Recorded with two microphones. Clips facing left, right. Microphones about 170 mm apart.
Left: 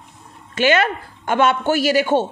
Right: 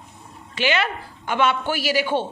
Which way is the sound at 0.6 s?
45° left (ahead or behind).